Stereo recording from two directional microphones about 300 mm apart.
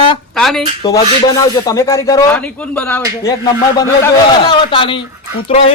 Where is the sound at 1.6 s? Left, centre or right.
Centre.